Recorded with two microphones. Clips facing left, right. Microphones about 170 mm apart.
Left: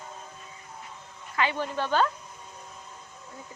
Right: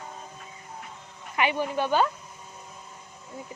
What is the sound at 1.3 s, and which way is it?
Speech, 15° right (ahead or behind).